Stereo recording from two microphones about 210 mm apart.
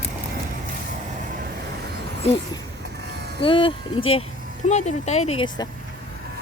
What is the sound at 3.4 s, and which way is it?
Speech, 25° left (ahead or behind).